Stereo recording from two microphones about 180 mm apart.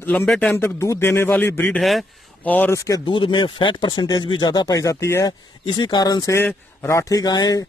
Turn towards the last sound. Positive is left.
turn(degrees=20)  # may be behind; listen again after turning